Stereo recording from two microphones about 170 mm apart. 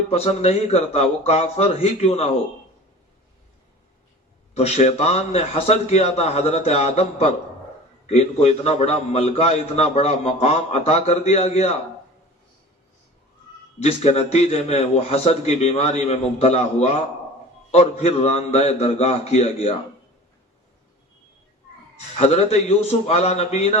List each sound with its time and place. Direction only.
0.1 s a man's voice: 40° left (ahead or behind)
4.5 s a man's voice: 40° left (ahead or behind)
13.7 s a man's voice: 35° left (ahead or behind)
22.2 s a man's voice: 40° left (ahead or behind)